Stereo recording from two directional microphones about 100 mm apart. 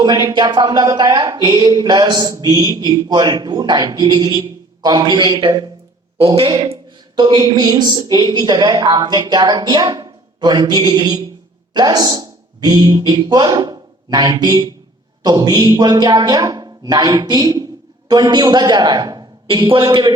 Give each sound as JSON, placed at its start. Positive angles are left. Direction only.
{"t": 0.0, "sound": "a woman's voice", "side_deg": -45}
{"t": 7.2, "sound": "a woman's voice", "side_deg": -50}
{"t": 19.5, "sound": "a woman's voice", "side_deg": -60}